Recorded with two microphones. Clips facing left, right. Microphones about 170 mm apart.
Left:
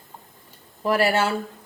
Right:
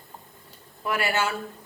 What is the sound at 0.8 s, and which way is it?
Speech, 35° left (ahead or behind).